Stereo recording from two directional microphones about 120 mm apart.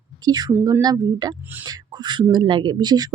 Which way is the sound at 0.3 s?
35° right (ahead or behind).